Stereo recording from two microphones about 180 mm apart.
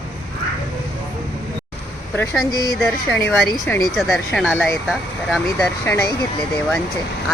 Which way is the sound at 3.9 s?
Centre (ahead or behind).